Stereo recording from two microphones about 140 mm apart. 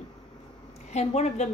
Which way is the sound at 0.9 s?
50° left (ahead or behind).